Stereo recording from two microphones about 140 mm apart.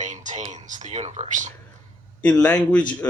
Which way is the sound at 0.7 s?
55° right (ahead or behind).